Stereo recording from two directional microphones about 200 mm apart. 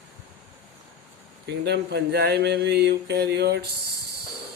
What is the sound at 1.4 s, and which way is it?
Speech, 60° right (ahead or behind).